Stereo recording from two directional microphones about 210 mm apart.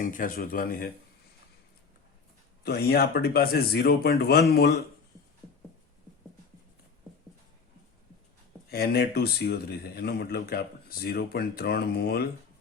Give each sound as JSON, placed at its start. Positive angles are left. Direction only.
{"t": 0.0, "sound": "speech", "side_deg": 40}
{"t": 2.6, "sound": "speech", "side_deg": 50}
{"t": 8.7, "sound": "speech", "side_deg": 50}